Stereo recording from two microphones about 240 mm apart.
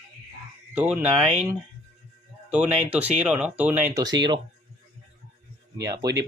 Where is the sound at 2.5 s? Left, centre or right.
Centre.